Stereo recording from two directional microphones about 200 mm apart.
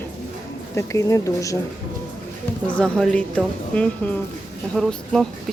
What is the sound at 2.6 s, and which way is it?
A woman's voice, 5° left (ahead or behind).